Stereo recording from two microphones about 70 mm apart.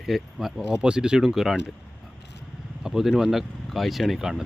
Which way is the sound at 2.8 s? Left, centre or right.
Centre.